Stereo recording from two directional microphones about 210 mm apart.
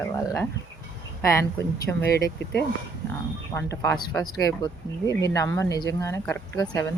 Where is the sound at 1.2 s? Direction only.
15° left (ahead or behind).